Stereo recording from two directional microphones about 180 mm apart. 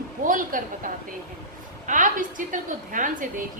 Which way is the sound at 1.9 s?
45° right (ahead or behind).